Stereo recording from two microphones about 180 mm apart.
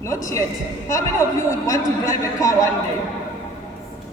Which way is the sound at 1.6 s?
20° left (ahead or behind).